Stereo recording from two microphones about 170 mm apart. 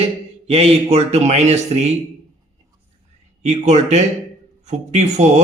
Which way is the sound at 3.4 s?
40° right (ahead or behind).